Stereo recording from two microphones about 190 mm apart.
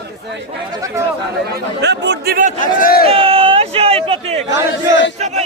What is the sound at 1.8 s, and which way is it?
Speech, 65° right (ahead or behind).